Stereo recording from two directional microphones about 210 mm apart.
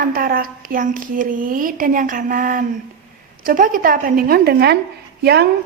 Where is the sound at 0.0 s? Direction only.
45° right (ahead or behind).